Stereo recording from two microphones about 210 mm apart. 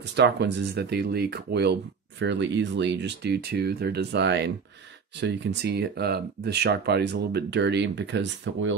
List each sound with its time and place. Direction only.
0.1 s speech: 55° right (ahead or behind)